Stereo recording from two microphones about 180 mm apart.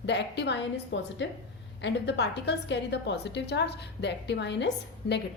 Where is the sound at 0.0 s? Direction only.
70° left (ahead or behind).